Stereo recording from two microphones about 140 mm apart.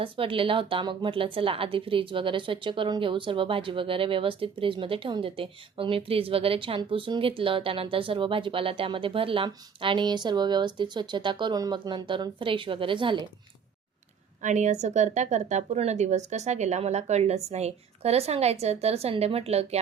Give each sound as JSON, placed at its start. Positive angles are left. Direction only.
{"t": 0.0, "sound": "a woman's voice", "side_deg": -40}
{"t": 14.4, "sound": "a woman's voice", "side_deg": -55}